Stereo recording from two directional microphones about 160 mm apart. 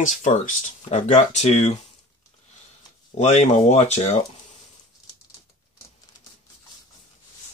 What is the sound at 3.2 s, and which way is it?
Speech, 45° left (ahead or behind).